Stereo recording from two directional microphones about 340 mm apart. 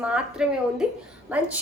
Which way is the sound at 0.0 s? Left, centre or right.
Centre.